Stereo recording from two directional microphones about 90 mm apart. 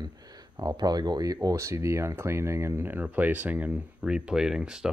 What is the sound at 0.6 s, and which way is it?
Speech, 50° right (ahead or behind).